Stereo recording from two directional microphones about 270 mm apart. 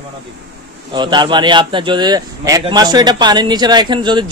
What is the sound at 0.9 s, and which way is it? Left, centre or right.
Speech, centre.